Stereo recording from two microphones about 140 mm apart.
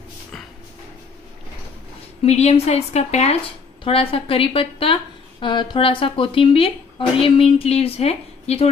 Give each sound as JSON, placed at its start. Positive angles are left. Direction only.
{"t": 2.2, "sound": "a woman's voice", "side_deg": 50}